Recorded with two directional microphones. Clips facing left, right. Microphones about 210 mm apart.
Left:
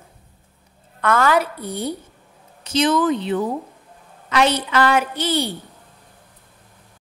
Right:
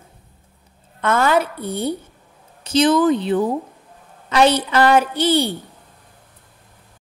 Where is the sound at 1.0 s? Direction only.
25° right (ahead or behind).